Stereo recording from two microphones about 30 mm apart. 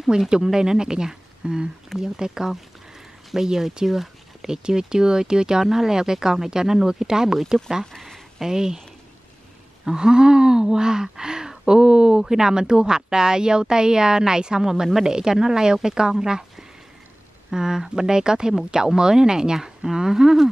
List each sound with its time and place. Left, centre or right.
0.3 s speech: right
3.8 s a sound: centre
4.5 s speech: right
8.4 s speech: centre
9.9 s speech: right